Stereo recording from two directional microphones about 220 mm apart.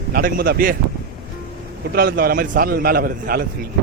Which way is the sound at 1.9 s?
40° right (ahead or behind).